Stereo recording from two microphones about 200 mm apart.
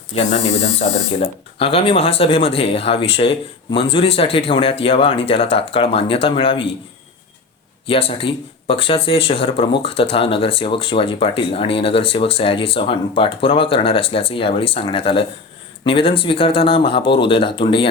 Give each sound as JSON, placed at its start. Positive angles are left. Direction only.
{"t": 0.1, "sound": "speech", "side_deg": 30}
{"t": 7.9, "sound": "speech", "side_deg": 30}